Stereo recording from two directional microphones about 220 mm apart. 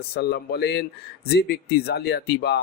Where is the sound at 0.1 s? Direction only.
50° left (ahead or behind).